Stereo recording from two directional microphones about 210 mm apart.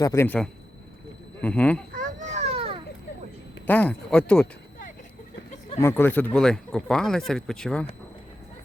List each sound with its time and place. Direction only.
0.0 s speech: 15° left (ahead or behind)
1.9 s a sound: 40° right (ahead or behind)
3.7 s speech: 10° left (ahead or behind)
5.8 s speech: 10° left (ahead or behind)